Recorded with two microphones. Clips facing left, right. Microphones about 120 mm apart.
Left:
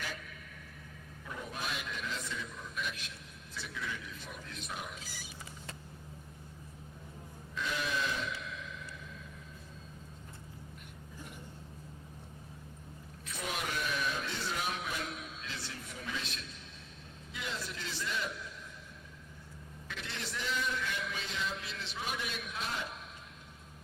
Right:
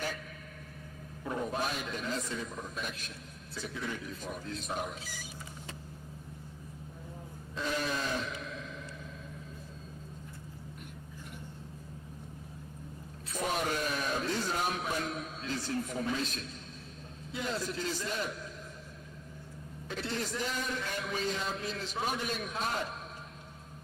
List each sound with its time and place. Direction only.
1.2 s a man's voice: 40° right (ahead or behind)
7.5 s grunt: 40° right (ahead or behind)
13.2 s a sound: 40° right (ahead or behind)
17.3 s a man's voice: 40° right (ahead or behind)
19.9 s a man's voice: 40° right (ahead or behind)